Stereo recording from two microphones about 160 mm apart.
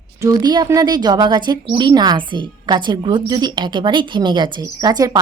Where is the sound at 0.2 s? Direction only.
25° right (ahead or behind).